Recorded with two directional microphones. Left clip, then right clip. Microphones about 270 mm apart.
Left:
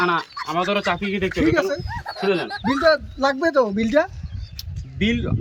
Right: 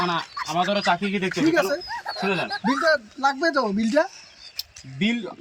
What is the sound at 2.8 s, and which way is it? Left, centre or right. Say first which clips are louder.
Speech: left 4 dB; left.